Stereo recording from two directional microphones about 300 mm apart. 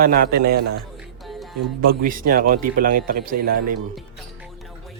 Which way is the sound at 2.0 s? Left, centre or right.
Right.